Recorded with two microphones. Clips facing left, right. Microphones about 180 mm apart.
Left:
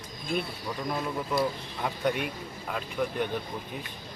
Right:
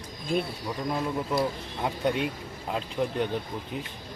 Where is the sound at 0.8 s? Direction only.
20° right (ahead or behind).